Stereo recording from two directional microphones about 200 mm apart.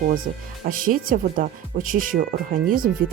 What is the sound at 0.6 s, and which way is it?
Speech, 45° right (ahead or behind).